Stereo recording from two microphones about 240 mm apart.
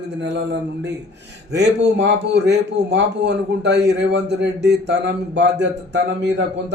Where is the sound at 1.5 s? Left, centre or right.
Right.